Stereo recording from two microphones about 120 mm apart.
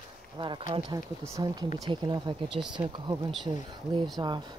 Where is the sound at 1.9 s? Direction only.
35° right (ahead or behind).